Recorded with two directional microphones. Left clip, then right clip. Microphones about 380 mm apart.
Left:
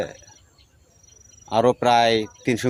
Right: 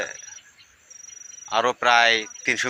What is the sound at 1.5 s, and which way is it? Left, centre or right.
Speech, left.